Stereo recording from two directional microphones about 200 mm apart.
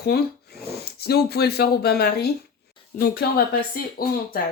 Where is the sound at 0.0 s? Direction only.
50° left (ahead or behind).